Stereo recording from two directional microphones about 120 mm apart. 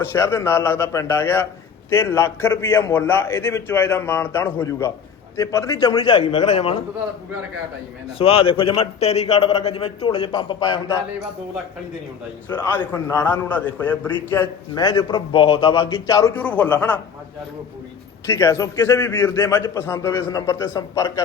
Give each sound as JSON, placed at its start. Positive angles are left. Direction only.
{"t": 0.1, "sound": "a man's voice", "side_deg": 20}
{"t": 6.3, "sound": "a man's voice", "side_deg": 55}
{"t": 8.2, "sound": "a man's voice", "side_deg": 50}
{"t": 10.0, "sound": "a man's voice", "side_deg": 40}
{"t": 12.5, "sound": "a man's voice", "side_deg": 20}
{"t": 14.8, "sound": "a man's voice", "side_deg": 35}
{"t": 15.9, "sound": "a man's voice", "side_deg": 30}
{"t": 16.3, "sound": "a man's voice", "side_deg": 15}
{"t": 18.3, "sound": "a man's voice", "side_deg": 25}